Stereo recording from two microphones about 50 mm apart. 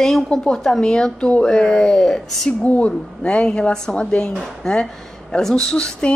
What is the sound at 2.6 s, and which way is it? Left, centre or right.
A woman's voice, left.